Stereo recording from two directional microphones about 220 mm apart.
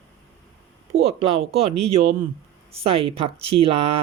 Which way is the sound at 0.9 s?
30° right (ahead or behind).